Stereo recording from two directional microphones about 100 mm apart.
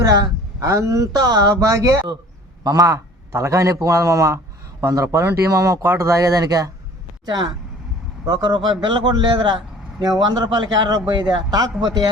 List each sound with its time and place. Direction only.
0.0 s a man's voice: 40° right (ahead or behind)